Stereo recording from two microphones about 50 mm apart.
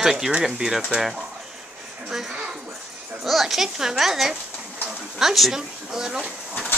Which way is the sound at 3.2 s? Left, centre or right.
Centre.